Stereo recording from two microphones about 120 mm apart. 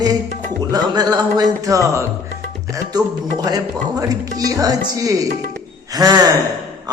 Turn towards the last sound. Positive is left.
turn(degrees=-30)  # may be behind; listen again after turning